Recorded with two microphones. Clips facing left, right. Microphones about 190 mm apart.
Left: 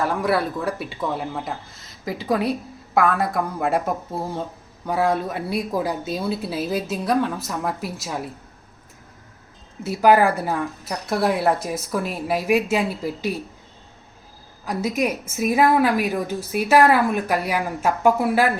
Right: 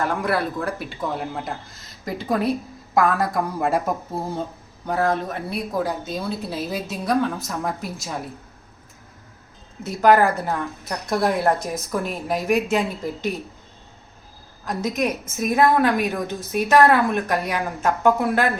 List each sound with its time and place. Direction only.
0.0 s a woman's voice: 5° left (ahead or behind)
4.9 s a woman's voice: 10° left (ahead or behind)
9.8 s speech: 5° left (ahead or behind)
14.6 s speech: 10° left (ahead or behind)